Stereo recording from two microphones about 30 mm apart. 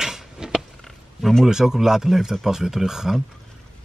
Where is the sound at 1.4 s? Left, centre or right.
Centre.